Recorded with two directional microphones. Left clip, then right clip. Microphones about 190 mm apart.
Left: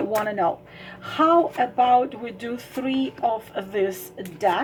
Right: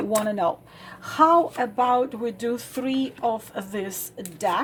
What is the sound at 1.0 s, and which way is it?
Speech, 35° right (ahead or behind).